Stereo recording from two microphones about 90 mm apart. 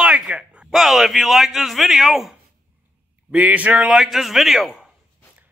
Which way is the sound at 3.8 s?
5° right (ahead or behind).